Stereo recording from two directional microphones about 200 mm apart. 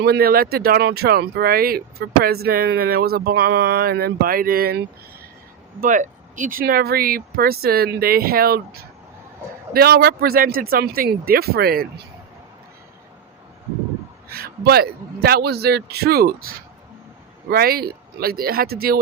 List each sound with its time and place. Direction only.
0.0 s speech: 50° right (ahead or behind)
5.8 s speech: 40° right (ahead or behind)
9.7 s speech: 50° right (ahead or behind)
14.3 s speech: 50° right (ahead or behind)